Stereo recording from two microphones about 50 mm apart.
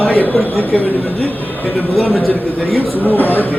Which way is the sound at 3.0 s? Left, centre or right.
Left.